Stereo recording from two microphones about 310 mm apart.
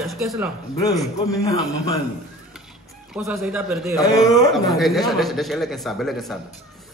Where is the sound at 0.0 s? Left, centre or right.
Centre.